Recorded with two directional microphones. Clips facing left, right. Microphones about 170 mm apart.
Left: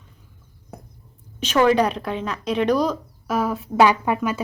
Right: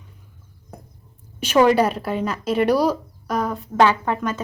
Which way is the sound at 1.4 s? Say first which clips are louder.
Right 2 dB; 10° right (ahead or behind).